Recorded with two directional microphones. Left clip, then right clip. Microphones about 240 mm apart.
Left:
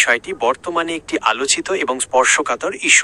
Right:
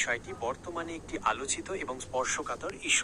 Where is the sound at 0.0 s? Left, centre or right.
Left.